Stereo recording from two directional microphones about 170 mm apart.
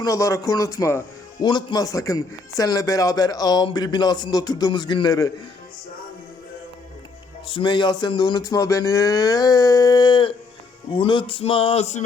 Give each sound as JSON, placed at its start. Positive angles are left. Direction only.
{"t": 0.0, "sound": "a man's voice", "side_deg": 20}
{"t": 7.4, "sound": "a man's voice", "side_deg": 30}
{"t": 10.9, "sound": "a sound", "side_deg": 30}